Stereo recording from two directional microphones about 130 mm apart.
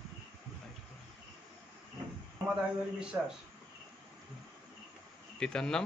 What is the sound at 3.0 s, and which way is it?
Speech, 5° right (ahead or behind).